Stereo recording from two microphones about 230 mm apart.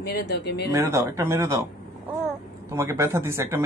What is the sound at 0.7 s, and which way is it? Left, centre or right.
Speech, centre.